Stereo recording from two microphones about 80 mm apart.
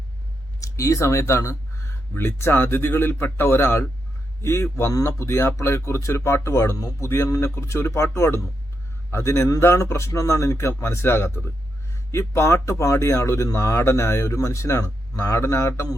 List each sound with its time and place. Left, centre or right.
0.6 s speech: left